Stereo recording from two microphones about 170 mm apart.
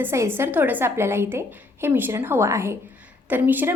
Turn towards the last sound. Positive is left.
turn(degrees=-10)  # may be behind; listen again after turning